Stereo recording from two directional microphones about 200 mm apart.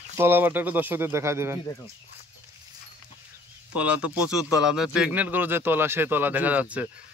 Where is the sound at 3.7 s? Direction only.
5° right (ahead or behind).